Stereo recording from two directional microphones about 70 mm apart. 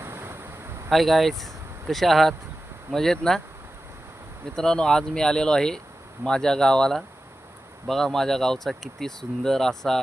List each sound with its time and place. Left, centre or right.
0.0 s a sound: right
0.9 s speech: centre
4.5 s speech: centre